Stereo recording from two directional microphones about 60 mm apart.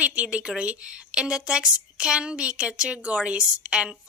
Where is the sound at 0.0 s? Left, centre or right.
Centre.